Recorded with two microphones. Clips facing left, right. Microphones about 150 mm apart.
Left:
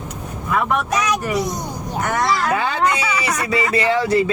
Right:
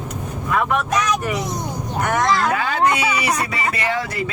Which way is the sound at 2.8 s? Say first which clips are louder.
Right 1 dB; 25° right (ahead or behind).